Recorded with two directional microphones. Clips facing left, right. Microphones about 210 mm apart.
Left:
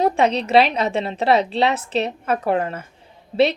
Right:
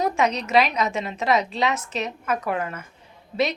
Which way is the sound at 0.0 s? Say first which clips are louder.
Left 5 dB; 30° left (ahead or behind).